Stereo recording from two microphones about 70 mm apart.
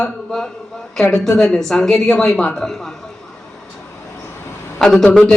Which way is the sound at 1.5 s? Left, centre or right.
Centre.